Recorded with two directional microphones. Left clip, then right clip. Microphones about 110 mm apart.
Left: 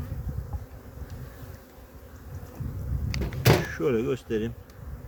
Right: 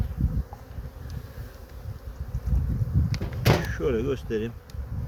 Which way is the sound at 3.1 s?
80° left.